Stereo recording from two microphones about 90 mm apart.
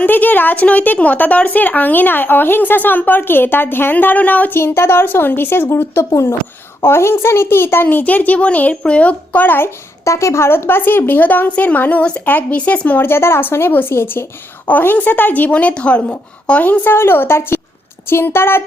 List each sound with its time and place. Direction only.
0.0 s a woman's voice: 20° left (ahead or behind)
10.0 s a woman's voice: 35° left (ahead or behind)